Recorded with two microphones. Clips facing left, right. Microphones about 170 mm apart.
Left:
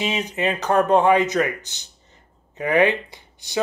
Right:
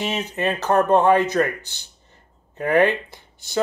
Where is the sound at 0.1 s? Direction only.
15° left (ahead or behind).